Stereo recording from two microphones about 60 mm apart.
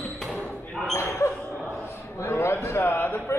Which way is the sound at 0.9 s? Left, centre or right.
Left.